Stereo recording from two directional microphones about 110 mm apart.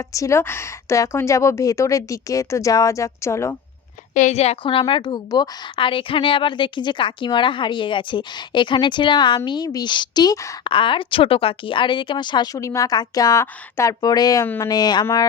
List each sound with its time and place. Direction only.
0.1 s speech: 30° left (ahead or behind)
4.3 s a woman's voice: 75° left (ahead or behind)
4.6 s a woman's voice: 55° left (ahead or behind); by 10.5 s 30° left (ahead or behind)
10.6 s a woman's voice: 50° left (ahead or behind)
12.5 s a woman's voice: 30° left (ahead or behind)
14.4 s speech: 15° left (ahead or behind)
14.7 s a woman's voice: 40° left (ahead or behind)